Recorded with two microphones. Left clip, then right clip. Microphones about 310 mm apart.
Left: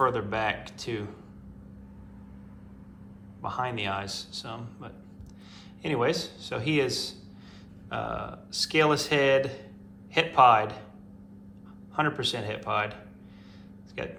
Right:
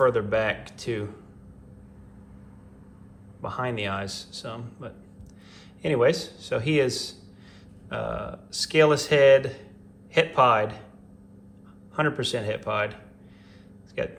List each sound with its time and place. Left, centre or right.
0.0 s speech: centre
3.4 s speech: centre
11.9 s speech: centre
14.0 s speech: centre